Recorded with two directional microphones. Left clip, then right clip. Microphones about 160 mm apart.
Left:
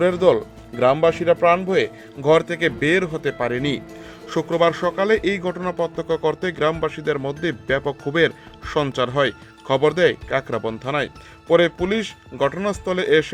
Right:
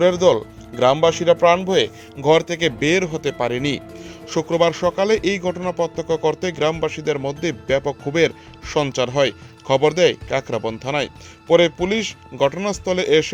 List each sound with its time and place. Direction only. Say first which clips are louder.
0.0 s a man's voice: right 2 dB; 25° right (ahead or behind)